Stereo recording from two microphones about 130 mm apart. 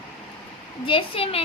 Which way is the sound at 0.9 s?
45° left (ahead or behind).